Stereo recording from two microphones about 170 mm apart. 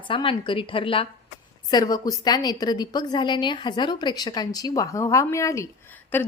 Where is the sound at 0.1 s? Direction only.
30° left (ahead or behind).